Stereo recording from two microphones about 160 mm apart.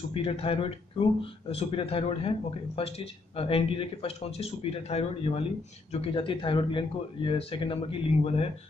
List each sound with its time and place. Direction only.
0.1 s speech: 35° left (ahead or behind)